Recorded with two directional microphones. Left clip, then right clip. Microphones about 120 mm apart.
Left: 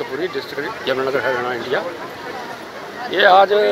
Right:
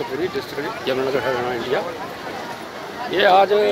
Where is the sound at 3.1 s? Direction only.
25° right (ahead or behind).